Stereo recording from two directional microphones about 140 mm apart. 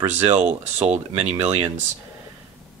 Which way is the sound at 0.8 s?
50° right (ahead or behind).